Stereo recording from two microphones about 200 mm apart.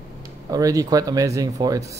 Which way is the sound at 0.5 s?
15° right (ahead or behind).